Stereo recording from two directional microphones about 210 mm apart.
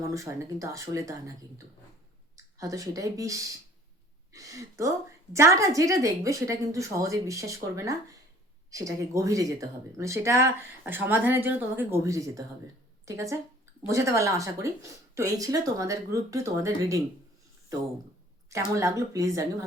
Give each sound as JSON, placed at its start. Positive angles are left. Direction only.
{"t": 0.1, "sound": "speech", "side_deg": -15}
{"t": 2.3, "sound": "speech", "side_deg": -15}
{"t": 18.5, "sound": "speech", "side_deg": -15}